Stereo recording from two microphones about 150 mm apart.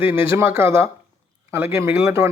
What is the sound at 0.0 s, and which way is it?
Speech, 15° right (ahead or behind).